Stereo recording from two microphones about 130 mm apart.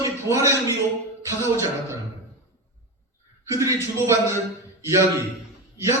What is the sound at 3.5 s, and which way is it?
Speech, 25° right (ahead or behind).